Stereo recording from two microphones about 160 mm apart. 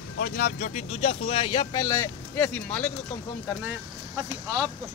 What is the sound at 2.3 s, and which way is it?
Speech, 10° left (ahead or behind).